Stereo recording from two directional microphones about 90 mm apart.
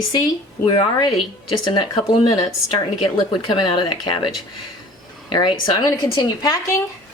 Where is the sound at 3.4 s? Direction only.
60° left (ahead or behind).